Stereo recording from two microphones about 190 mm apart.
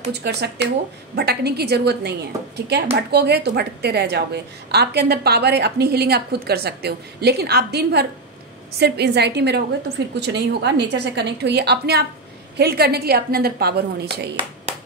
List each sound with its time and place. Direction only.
0.1 s a woman's voice: 60° right (ahead or behind)